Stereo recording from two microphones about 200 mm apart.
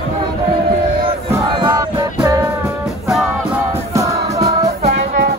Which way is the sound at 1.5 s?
25° right (ahead or behind).